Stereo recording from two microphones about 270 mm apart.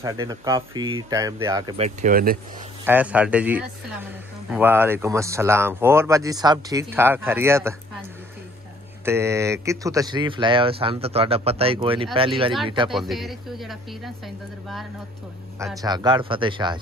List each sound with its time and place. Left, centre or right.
0.0 s speech: centre
1.8 s speech: right
2.8 s speech: centre
9.0 s speech: centre
12.9 s speech: centre
15.6 s speech: centre